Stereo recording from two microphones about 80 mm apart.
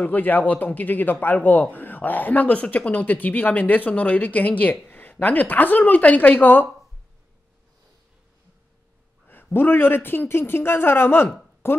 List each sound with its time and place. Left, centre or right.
0.0 s speech: left
9.3 s speech: left